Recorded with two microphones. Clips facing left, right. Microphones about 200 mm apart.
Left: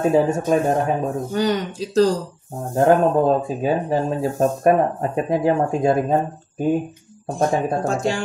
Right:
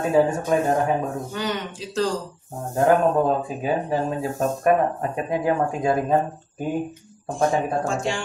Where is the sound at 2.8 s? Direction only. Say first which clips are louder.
Left 3 dB; 30° left (ahead or behind).